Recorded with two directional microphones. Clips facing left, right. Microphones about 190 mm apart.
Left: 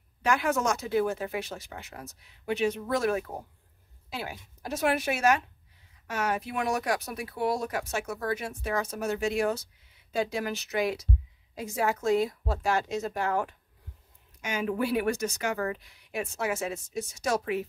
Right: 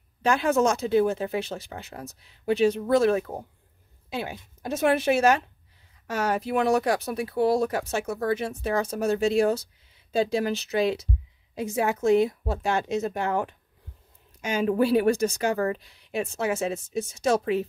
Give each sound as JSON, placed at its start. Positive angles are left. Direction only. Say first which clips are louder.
{"t": 0.2, "sound": "speech", "louder": "right 5 dB", "side_deg": -30}